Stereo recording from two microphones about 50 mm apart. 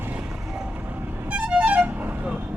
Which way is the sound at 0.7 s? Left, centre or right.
Right.